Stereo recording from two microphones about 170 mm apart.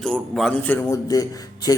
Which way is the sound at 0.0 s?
5° left (ahead or behind).